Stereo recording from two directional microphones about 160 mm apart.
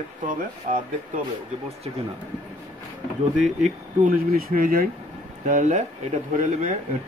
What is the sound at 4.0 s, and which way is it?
Speech, 65° right (ahead or behind).